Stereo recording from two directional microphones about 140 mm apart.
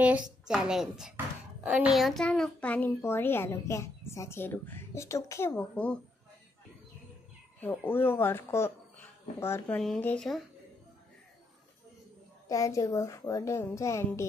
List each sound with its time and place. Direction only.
0.5 s a woman's voice: 5° right (ahead or behind)
7.6 s a child's voice: 10° left (ahead or behind)
9.8 s a woman's voice: 5° left (ahead or behind)
12.4 s a child's voice: 25° left (ahead or behind)